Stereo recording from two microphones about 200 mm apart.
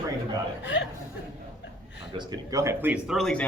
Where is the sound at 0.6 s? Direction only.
60° left (ahead or behind).